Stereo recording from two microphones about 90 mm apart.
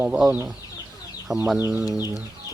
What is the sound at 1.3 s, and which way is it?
Speech, 5° right (ahead or behind).